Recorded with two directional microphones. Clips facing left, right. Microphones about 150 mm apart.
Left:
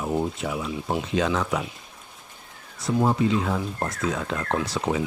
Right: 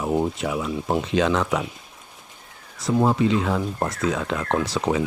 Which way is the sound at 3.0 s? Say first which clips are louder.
Right 2 dB; 90° right.